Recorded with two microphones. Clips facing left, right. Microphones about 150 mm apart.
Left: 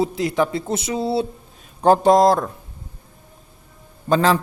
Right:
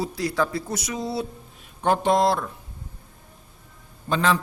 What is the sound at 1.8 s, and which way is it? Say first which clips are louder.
Music: left 7 dB; 35° left (ahead or behind).